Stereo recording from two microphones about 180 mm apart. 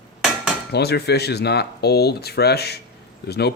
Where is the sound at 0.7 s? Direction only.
65° left (ahead or behind).